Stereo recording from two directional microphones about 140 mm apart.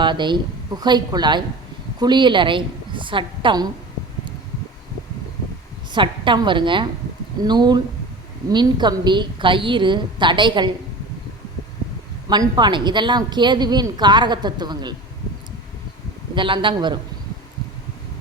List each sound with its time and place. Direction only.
0.0 s a woman's voice: 35° right (ahead or behind)
5.9 s a woman's voice: 35° right (ahead or behind)
12.3 s a woman's voice: 30° right (ahead or behind)
16.3 s a woman's voice: 35° right (ahead or behind)